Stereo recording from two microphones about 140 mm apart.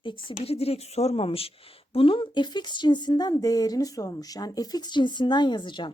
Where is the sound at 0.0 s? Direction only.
35° left (ahead or behind).